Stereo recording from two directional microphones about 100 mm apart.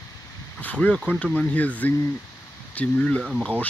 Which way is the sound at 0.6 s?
15° left (ahead or behind).